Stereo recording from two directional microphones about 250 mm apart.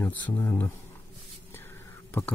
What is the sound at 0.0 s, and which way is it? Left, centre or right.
Speech, centre.